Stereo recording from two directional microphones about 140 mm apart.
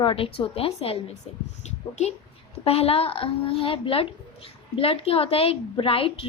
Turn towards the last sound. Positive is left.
turn(degrees=40)  # may be behind; listen again after turning